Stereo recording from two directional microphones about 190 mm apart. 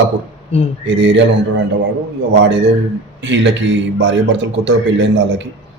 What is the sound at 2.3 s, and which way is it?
A man's voice, 70° right (ahead or behind).